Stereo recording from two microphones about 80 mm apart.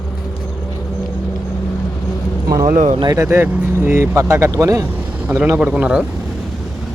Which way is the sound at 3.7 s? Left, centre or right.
Right.